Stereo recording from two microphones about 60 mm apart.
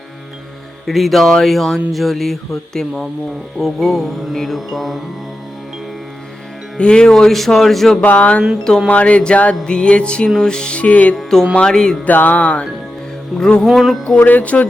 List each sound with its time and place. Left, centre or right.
0.9 s mantra: centre
6.7 s speech: centre
8.0 s music: left
11.1 s speech: centre
12.0 s music: left
13.4 s speech: centre
13.7 s mantra: centre
14.2 s music: left